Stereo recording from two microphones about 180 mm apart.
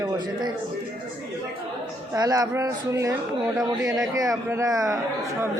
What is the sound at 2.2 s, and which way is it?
Speech, 20° right (ahead or behind).